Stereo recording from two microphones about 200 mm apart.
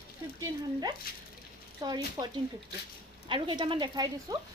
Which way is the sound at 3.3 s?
25° right (ahead or behind).